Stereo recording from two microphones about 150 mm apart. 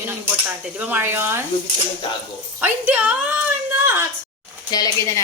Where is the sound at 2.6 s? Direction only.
10° right (ahead or behind).